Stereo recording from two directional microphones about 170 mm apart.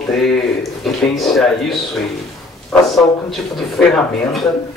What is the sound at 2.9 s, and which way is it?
Speech, centre (ahead or behind).